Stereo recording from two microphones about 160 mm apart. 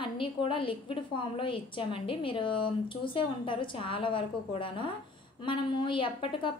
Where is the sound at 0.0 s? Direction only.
30° left (ahead or behind).